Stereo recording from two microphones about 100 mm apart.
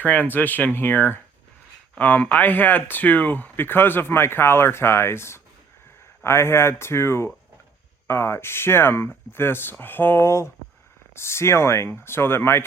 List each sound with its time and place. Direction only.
0.0 s speech: 15° left (ahead or behind)